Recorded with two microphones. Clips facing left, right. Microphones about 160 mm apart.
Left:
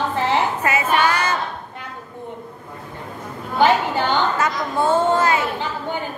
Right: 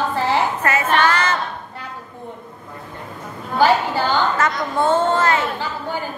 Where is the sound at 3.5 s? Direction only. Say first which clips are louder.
Even; 20° left (ahead or behind).